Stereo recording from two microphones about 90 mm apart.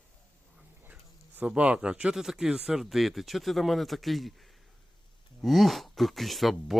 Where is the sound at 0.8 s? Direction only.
20° right (ahead or behind).